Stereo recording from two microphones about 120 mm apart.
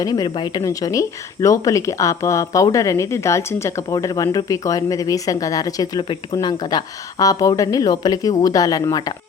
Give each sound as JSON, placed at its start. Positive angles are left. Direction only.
{"t": 0.0, "sound": "a woman's voice", "side_deg": 35}